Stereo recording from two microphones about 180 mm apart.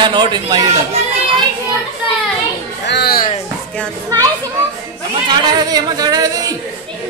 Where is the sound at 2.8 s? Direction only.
65° left (ahead or behind).